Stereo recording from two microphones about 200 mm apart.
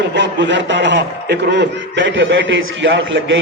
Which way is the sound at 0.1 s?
65° right (ahead or behind).